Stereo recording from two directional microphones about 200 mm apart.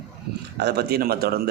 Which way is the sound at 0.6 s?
55° right (ahead or behind).